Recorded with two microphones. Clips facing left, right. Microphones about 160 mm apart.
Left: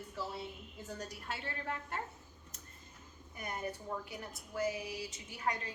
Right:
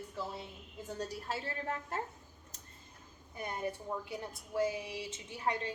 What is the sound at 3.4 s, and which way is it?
A woman's voice, 25° right (ahead or behind).